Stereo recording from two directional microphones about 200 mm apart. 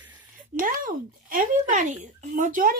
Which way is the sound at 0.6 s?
45° right (ahead or behind).